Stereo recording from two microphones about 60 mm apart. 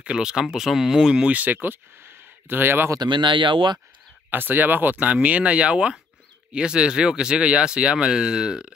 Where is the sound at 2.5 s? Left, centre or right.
Right.